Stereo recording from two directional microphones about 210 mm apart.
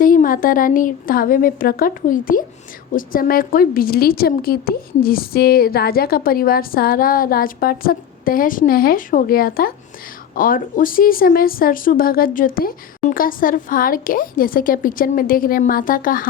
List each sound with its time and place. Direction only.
0.0 s a woman's voice: 40° left (ahead or behind)